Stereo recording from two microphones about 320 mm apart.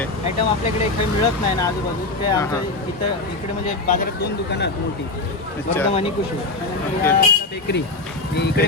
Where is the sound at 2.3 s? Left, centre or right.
Centre.